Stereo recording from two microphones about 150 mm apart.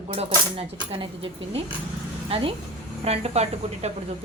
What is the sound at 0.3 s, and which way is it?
A woman's voice, 40° right (ahead or behind).